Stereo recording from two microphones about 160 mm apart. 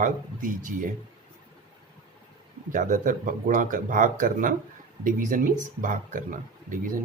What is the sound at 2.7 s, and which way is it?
Speech, 55° right (ahead or behind).